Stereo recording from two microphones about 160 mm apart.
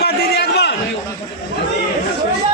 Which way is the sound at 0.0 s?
90° left.